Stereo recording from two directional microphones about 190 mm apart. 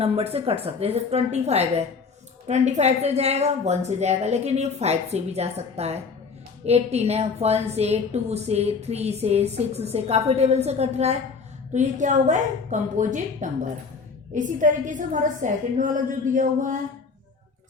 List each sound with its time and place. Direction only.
0.0 s a woman's voice: 30° right (ahead or behind)